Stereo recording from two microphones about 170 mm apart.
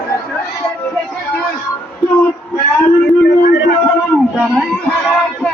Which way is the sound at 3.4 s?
90° left.